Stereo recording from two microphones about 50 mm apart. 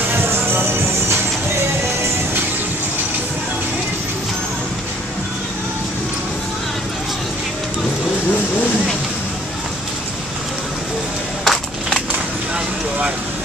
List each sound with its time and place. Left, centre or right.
0.1 s music: right
11.4 s crushing: centre